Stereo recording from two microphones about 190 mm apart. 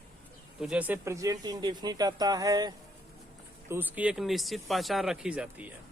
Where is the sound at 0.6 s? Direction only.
5° right (ahead or behind).